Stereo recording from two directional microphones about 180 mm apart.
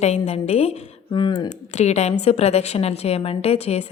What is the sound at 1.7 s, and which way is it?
A woman's voice, 40° left (ahead or behind).